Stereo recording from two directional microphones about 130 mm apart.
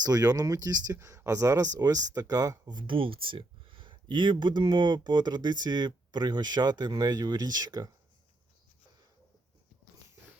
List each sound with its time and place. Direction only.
0.0 s speech: 30° right (ahead or behind)